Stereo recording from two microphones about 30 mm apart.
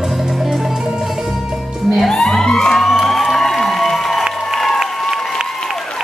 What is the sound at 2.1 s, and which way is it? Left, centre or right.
Music, centre.